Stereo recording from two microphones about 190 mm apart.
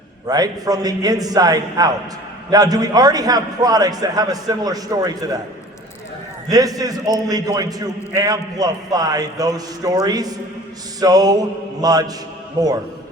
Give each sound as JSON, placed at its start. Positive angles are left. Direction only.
{"t": 0.3, "sound": "a man's voice", "side_deg": -20}
{"t": 6.5, "sound": "a man's voice", "side_deg": -20}